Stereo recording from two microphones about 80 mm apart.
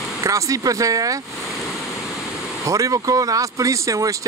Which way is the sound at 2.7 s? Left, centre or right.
Right.